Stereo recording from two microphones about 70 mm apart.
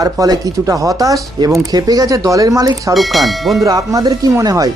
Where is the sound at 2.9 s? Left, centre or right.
Centre.